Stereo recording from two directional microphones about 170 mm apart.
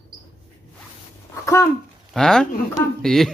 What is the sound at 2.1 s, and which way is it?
Speech, 5° left (ahead or behind).